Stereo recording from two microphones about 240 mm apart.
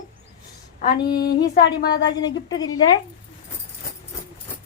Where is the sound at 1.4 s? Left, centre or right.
Left.